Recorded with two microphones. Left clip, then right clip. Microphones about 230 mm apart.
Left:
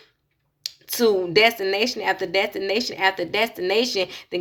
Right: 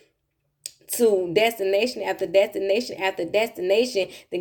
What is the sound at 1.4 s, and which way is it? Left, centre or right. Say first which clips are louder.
Speech: left 2 dB; centre.